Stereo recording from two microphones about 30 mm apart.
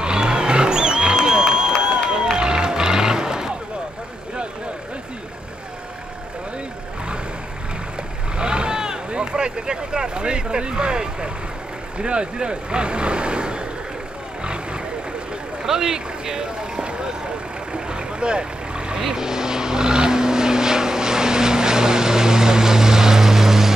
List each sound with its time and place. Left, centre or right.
0.0 s music: right
1.1 s crowd: right
2.3 s music: right
8.4 s vehicle: right
12.0 s speech: right
14.4 s vehicle: right
15.7 s boat: right
19.0 s vehicle: centre